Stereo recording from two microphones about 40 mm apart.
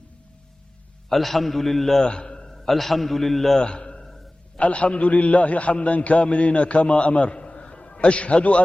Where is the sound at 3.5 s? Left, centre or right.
Left.